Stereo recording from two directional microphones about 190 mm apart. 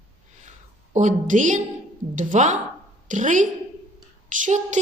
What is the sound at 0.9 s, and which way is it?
A woman's voice, 40° right (ahead or behind).